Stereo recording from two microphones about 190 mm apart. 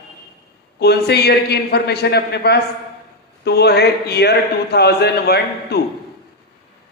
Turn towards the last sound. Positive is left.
turn(degrees=60)  # may be behind; listen again after turning